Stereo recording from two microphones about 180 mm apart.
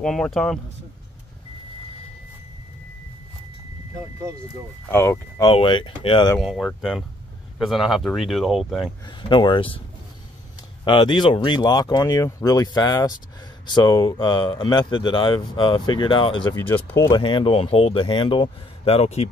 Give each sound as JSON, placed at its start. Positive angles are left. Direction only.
{"t": 0.0, "sound": "speech", "side_deg": 0}
{"t": 4.8, "sound": "speech", "side_deg": 10}
{"t": 5.5, "sound": "speech", "side_deg": 30}
{"t": 6.4, "sound": "speech", "side_deg": 0}
{"t": 9.3, "sound": "speech", "side_deg": 25}
{"t": 10.9, "sound": "speech", "side_deg": 25}
{"t": 16.5, "sound": "speech", "side_deg": 15}
{"t": 17.2, "sound": "speech", "side_deg": 30}